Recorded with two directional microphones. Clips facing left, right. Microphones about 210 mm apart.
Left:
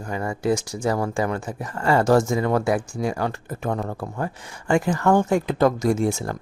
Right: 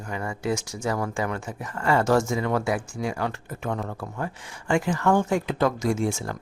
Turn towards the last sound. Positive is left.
turn(degrees=40)  # may be behind; listen again after turning